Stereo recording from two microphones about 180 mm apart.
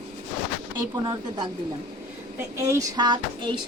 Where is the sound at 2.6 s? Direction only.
20° right (ahead or behind).